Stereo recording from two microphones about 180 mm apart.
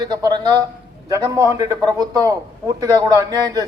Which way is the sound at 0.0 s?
20° right (ahead or behind).